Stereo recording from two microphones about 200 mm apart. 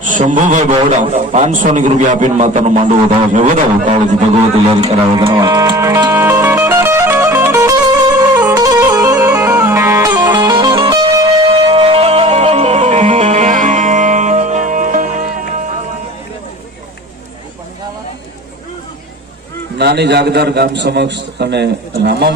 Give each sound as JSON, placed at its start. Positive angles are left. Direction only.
{"t": 0.0, "sound": "a man's voice", "side_deg": -40}
{"t": 4.8, "sound": "music", "side_deg": -25}
{"t": 11.7, "sound": "music", "side_deg": -30}
{"t": 19.8, "sound": "a man's voice", "side_deg": -55}